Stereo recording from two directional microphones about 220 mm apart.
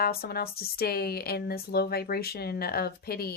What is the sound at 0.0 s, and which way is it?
Speech, 45° left (ahead or behind).